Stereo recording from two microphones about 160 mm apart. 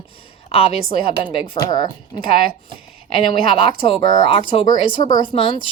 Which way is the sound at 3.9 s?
35° left (ahead or behind).